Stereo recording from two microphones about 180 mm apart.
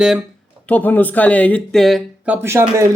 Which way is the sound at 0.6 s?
10° left (ahead or behind).